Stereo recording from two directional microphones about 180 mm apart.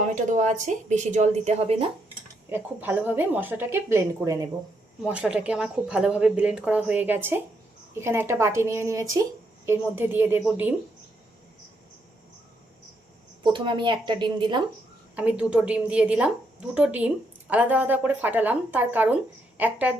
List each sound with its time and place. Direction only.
0.0 s a woman's voice: 45° right (ahead or behind)
2.5 s speech: 10° right (ahead or behind)
5.0 s speech: 5° right (ahead or behind)
13.4 s a woman's voice: 25° right (ahead or behind)
15.1 s speech: 5° right (ahead or behind)